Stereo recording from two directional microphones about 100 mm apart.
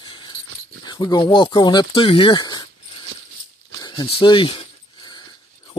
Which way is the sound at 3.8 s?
40° left (ahead or behind).